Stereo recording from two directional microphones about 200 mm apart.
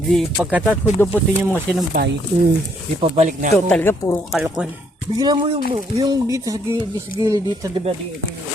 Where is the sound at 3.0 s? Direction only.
35° right (ahead or behind).